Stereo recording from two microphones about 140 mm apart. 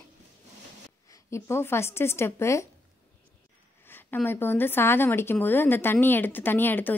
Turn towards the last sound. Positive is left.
turn(degrees=15)  # may be behind; listen again after turning